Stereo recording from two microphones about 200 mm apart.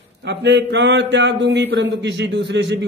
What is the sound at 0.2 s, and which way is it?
A man's voice, 60° right (ahead or behind).